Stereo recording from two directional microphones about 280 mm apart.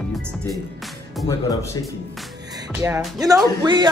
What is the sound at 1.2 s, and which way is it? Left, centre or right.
Speech, centre.